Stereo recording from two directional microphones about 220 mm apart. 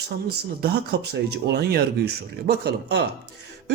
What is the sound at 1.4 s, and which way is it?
Speech, 50° right (ahead or behind).